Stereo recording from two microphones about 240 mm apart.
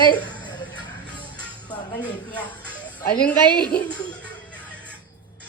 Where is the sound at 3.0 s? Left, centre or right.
Centre.